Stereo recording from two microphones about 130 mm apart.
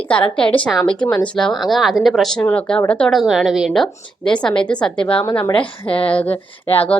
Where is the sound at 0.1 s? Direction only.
10° left (ahead or behind).